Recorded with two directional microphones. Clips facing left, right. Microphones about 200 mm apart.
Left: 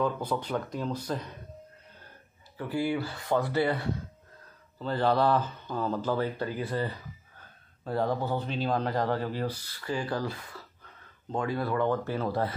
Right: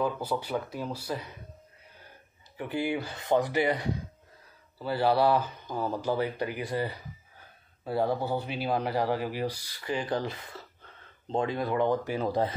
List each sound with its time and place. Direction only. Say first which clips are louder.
0.0 s speech: left 1 dB; 10° right (ahead or behind)
2.5 s speech: left 1 dB; 15° right (ahead or behind)